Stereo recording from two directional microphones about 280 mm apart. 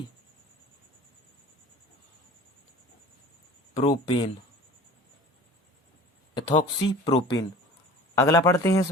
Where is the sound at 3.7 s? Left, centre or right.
Left.